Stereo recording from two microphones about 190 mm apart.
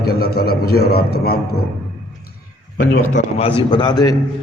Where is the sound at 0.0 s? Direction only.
55° left (ahead or behind).